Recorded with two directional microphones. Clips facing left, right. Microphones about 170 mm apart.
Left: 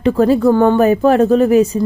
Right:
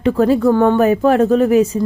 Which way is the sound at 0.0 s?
30° left (ahead or behind).